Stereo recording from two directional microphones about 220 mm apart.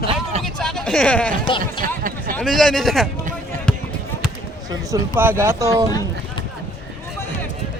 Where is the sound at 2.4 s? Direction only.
Centre (ahead or behind).